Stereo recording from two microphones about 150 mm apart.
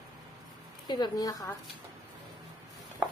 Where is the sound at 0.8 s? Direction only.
30° left (ahead or behind).